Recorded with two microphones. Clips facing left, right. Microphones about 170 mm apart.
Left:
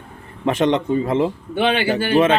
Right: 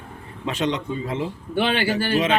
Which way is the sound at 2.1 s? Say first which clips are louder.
Left 8 dB; 55° left (ahead or behind).